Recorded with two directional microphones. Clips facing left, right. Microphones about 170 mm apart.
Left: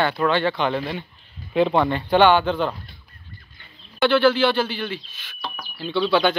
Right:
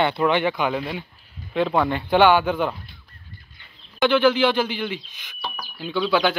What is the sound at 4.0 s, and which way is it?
Speech, 15° right (ahead or behind).